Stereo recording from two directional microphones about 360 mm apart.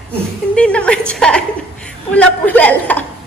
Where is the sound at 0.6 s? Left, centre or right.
Centre.